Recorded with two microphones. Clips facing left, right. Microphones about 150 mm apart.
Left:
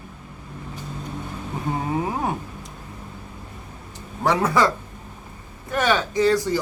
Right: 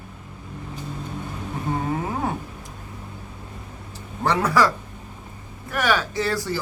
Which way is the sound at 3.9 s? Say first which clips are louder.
Left 1 dB; 15° left (ahead or behind).